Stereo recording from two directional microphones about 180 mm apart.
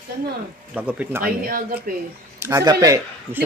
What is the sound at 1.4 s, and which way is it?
Speech, 55° right (ahead or behind).